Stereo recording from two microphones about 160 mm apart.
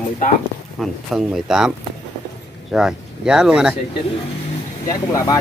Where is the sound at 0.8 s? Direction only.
Centre (ahead or behind).